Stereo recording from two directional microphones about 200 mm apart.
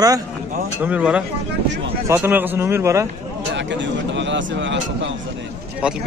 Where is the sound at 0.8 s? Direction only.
5° right (ahead or behind).